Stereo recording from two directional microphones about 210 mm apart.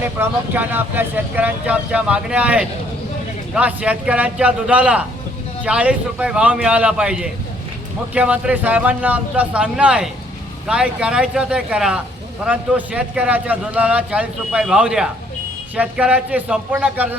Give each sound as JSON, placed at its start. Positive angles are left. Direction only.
{"t": 0.0, "sound": "a man's voice", "side_deg": -10}